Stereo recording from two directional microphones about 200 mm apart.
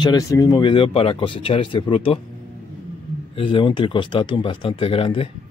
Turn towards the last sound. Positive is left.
turn(degrees=30)  # may be behind; listen again after turning